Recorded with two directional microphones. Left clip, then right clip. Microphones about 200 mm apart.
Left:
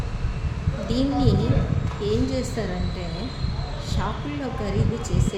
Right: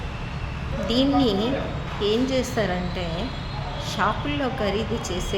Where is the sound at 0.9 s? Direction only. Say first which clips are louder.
Right 3 dB; 20° left (ahead or behind).